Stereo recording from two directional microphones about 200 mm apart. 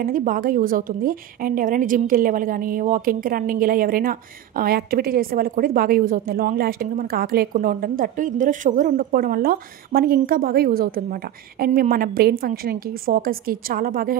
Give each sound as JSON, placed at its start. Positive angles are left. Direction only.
{"t": 0.0, "sound": "a woman's voice", "side_deg": -45}